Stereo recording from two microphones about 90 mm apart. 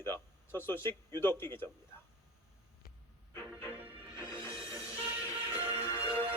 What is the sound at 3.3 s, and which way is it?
Music, 30° left (ahead or behind).